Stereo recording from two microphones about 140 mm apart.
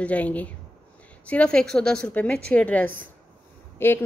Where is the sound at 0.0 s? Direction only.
10° left (ahead or behind).